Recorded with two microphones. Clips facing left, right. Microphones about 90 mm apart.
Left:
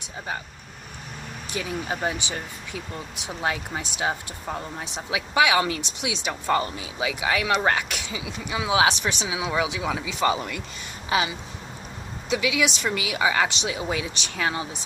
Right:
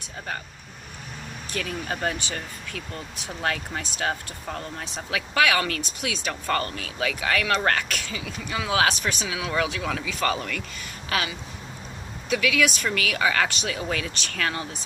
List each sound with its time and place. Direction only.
1.5 s speech: 15° left (ahead or behind)